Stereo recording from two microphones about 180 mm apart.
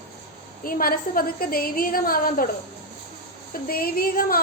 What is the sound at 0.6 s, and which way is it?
A woman's voice, 55° left (ahead or behind).